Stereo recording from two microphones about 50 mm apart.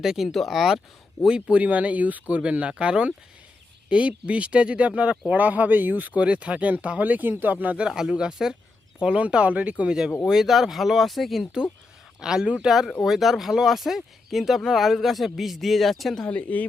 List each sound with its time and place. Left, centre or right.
0.0 s speech: centre
0.3 s speech: centre
1.5 s speech: right
6.1 s speech: right
7.9 s speech: centre
9.0 s speech: right
10.2 s speech: centre
12.2 s speech: centre
16.3 s speech: left